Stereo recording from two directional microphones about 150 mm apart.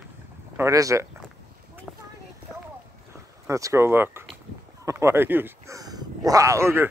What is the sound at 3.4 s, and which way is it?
Speech, 20° right (ahead or behind).